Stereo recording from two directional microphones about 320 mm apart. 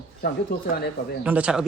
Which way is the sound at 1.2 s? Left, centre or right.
Centre.